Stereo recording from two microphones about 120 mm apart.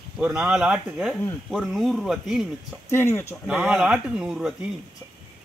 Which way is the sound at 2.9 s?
20° left (ahead or behind).